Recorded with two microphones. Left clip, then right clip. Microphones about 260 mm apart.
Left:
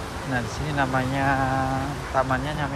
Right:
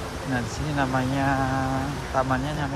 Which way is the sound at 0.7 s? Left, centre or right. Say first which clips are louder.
Left 1 dB; centre.